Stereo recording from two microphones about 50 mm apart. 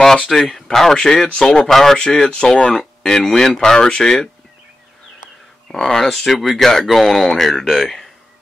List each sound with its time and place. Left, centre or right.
0.3 s speech: centre
1.7 s speech: centre
2.0 s speech: centre
5.7 s speech: centre